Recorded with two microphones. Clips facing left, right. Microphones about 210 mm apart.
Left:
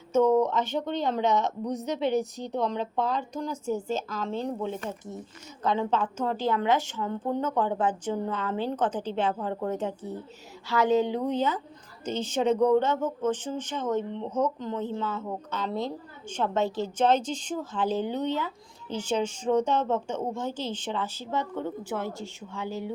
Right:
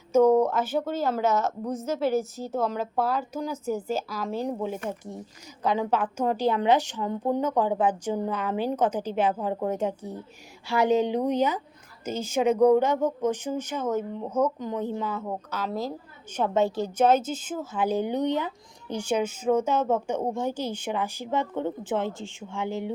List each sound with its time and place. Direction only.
0.1 s speech: 10° right (ahead or behind)